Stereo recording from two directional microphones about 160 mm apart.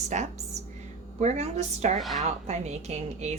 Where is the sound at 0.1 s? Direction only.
45° right (ahead or behind).